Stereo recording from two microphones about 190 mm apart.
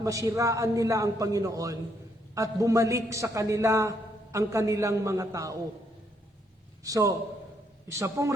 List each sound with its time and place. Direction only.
0.0 s a woman's voice: 15° right (ahead or behind)
6.8 s a woman's voice: 20° right (ahead or behind)